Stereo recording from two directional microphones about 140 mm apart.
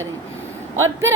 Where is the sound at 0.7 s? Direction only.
20° right (ahead or behind).